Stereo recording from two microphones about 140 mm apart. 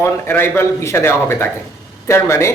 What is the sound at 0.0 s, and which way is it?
A man's voice, 15° left (ahead or behind).